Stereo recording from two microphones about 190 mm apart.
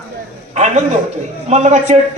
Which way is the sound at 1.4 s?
35° right (ahead or behind).